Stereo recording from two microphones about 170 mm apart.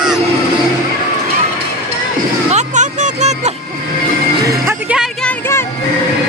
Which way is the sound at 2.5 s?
45° right (ahead or behind).